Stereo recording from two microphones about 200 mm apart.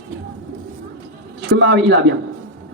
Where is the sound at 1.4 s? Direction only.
60° right (ahead or behind).